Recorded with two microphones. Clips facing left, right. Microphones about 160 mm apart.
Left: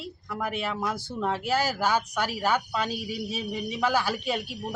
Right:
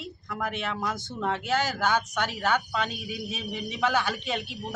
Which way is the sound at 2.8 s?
30° left (ahead or behind).